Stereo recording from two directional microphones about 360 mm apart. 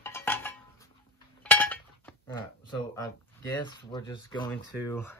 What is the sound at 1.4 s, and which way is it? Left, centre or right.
Chink, centre.